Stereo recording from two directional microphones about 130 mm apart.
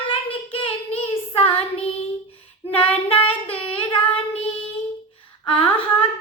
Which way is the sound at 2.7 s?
45° left (ahead or behind).